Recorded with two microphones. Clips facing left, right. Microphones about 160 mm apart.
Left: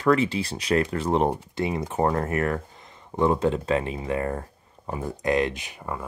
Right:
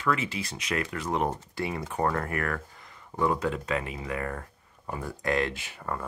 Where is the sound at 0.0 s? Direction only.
35° left (ahead or behind).